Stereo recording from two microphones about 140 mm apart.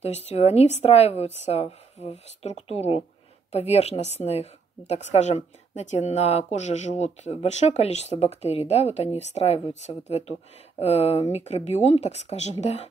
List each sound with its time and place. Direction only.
0.0 s speech: 50° left (ahead or behind)